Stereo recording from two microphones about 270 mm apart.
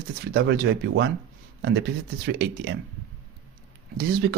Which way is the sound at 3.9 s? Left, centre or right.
Right.